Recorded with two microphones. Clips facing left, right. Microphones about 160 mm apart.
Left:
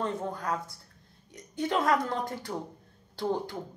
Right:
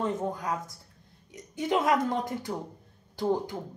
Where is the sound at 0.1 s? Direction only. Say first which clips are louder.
Right 2 dB; 20° right (ahead or behind).